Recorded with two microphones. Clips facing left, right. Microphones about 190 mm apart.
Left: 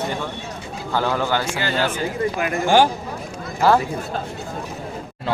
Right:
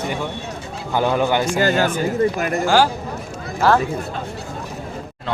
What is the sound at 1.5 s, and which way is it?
Speech, 45° right (ahead or behind).